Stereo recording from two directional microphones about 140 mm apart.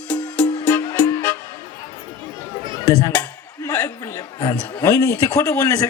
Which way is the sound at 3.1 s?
10° left (ahead or behind).